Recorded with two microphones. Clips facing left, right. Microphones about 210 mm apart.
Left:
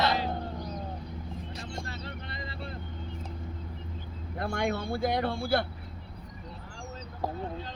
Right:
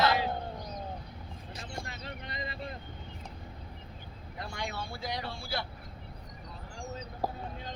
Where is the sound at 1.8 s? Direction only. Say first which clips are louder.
Left 2 dB; 15° right (ahead or behind).